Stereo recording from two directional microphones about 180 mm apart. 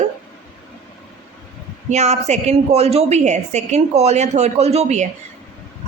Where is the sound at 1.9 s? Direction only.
40° right (ahead or behind).